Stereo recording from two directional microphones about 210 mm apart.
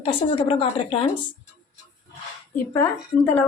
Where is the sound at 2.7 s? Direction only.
10° left (ahead or behind).